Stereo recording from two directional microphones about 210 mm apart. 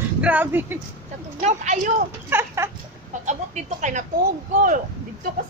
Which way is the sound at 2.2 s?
10° right (ahead or behind).